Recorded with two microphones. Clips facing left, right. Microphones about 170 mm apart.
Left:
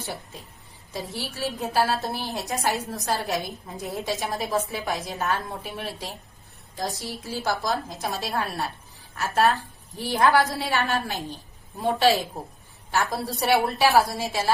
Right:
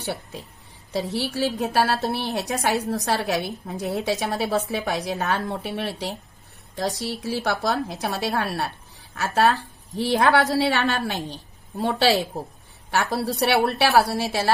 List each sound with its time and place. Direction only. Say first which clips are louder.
0.9 s a woman's voice: right 7 dB; 70° right (ahead or behind)